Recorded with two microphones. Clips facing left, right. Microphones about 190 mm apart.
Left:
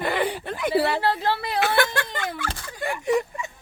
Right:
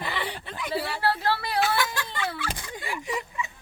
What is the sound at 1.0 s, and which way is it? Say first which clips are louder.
Speech: left 2 dB; 20° left (ahead or behind).